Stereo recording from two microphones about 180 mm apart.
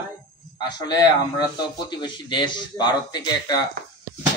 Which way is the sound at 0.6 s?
25° left (ahead or behind).